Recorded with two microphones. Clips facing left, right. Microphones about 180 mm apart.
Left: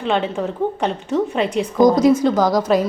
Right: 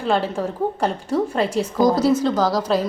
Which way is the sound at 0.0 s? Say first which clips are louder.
Left 1 dB; centre (ahead or behind).